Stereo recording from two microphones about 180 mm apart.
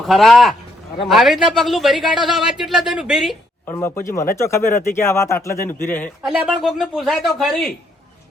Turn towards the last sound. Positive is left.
turn(degrees=0)  # may be behind; listen again after turning